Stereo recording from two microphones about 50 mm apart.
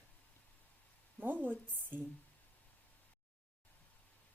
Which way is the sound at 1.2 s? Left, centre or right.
Right.